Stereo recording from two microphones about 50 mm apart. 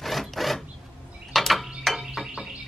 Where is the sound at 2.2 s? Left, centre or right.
Centre.